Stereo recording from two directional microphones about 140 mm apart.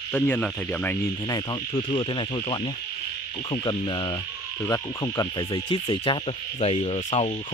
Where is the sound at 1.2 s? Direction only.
30° left (ahead or behind); by 7.1 s 50° left (ahead or behind).